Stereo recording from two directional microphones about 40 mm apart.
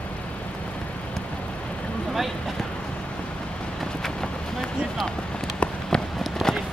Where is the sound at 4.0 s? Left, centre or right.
Centre.